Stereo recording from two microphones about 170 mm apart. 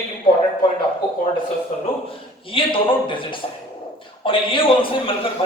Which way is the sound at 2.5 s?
30° left (ahead or behind).